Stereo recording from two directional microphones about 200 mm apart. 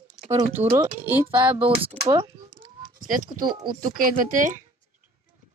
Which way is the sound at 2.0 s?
25° right (ahead or behind).